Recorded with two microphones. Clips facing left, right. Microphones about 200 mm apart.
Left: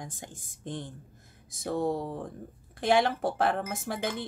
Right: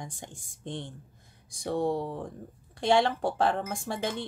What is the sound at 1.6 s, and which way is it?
Speech, 5° left (ahead or behind).